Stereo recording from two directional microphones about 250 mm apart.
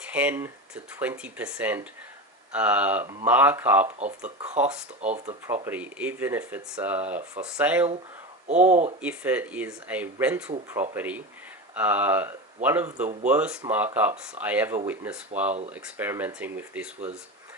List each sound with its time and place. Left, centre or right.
0.1 s speech: centre
8.4 s speech: right
9.0 s speech: centre